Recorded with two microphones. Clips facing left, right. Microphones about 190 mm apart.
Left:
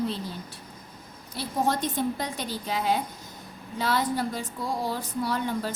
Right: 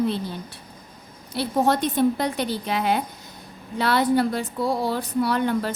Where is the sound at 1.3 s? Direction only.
70° right (ahead or behind).